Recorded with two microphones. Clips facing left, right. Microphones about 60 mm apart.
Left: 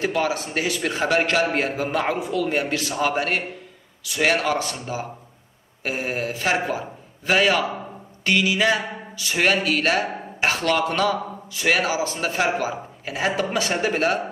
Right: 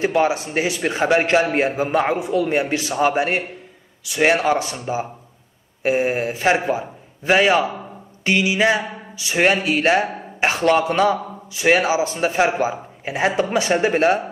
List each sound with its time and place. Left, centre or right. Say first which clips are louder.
0.0 s a man's voice: right 5 dB; right